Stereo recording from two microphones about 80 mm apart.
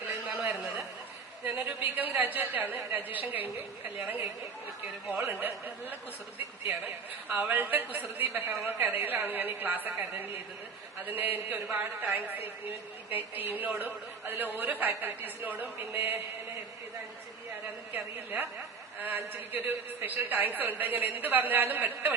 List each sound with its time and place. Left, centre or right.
1.5 s a woman's voice: right
7.3 s a woman's voice: right
17.9 s a woman's voice: right